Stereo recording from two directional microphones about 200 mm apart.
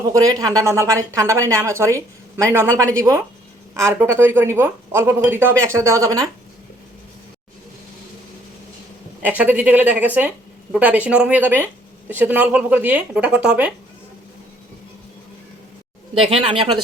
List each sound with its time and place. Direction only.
0.1 s speech: 15° right (ahead or behind)
9.2 s speech: 10° right (ahead or behind)
16.2 s speech: 25° right (ahead or behind)